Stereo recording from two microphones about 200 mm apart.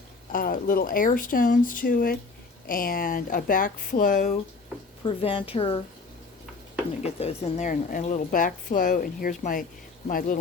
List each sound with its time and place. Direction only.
0.3 s speech: 45° left (ahead or behind)
5.0 s a woman's voice: 25° left (ahead or behind)
7.0 s a woman's voice: 30° left (ahead or behind)